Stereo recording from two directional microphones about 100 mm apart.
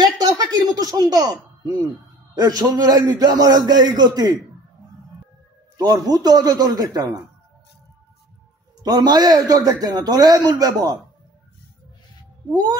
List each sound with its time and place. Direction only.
0.0 s a sound: 40° right (ahead or behind)
2.3 s a man's voice: 40° right (ahead or behind)
5.8 s a man's voice: 40° right (ahead or behind)
8.8 s a man's voice: 40° right (ahead or behind)